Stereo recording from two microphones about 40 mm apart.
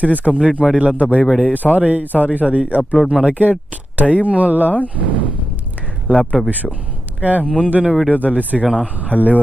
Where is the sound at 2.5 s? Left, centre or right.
Right.